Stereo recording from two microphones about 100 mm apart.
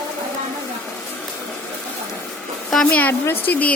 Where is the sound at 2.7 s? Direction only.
10° left (ahead or behind).